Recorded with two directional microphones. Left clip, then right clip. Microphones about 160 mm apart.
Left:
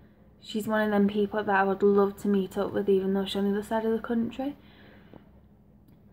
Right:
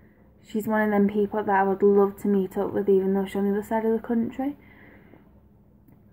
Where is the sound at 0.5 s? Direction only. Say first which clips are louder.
Right 3 dB; 10° right (ahead or behind).